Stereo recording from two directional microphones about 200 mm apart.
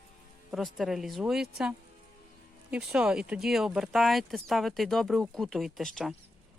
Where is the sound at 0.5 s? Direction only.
Centre (ahead or behind).